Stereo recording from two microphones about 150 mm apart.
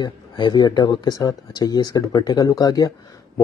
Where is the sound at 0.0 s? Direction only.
30° left (ahead or behind).